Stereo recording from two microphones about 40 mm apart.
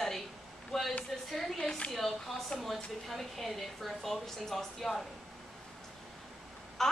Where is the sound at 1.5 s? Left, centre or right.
Centre.